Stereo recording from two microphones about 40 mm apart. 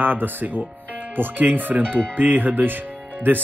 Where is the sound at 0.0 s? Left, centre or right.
Right.